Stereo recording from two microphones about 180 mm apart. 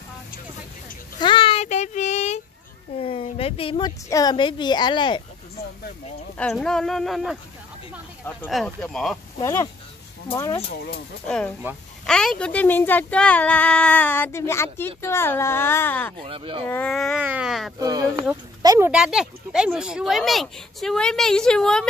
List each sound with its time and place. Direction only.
1.2 s child singing: 30° left (ahead or behind)
3.0 s speech: 30° left (ahead or behind)
6.3 s speech: 5° left (ahead or behind)
8.5 s speech: 5° left (ahead or behind)
9.4 s speech: 15° left (ahead or behind)
11.2 s speech: 5° left (ahead or behind)
16.2 s speech: 30° right (ahead or behind)
16.6 s speech: 10° left (ahead or behind)
17.7 s speech: 20° right (ahead or behind)
18.9 s speech: 5° right (ahead or behind)